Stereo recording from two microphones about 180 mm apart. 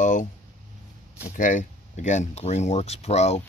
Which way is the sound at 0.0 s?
45° left (ahead or behind).